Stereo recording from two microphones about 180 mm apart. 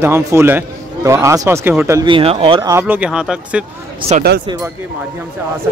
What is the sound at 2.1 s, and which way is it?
Speech, 30° right (ahead or behind).